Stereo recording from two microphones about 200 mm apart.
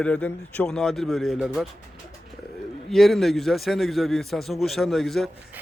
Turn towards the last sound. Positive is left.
turn(degrees=0)  # may be behind; listen again after turning